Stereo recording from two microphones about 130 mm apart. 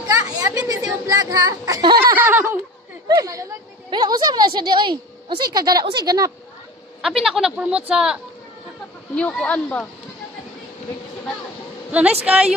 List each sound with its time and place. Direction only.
0.1 s a sound: 25° right (ahead or behind)
1.0 s speech: 25° right (ahead or behind)
2.1 s a sound: 15° right (ahead or behind)
3.2 s a woman's voice: 25° right (ahead or behind)
7.0 s speech: 5° right (ahead or behind)
9.1 s speech: 10° left (ahead or behind)
11.9 s a woman's voice: 10° right (ahead or behind)